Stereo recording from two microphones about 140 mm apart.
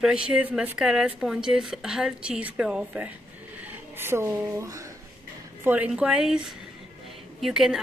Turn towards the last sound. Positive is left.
turn(degrees=0)  # may be behind; listen again after turning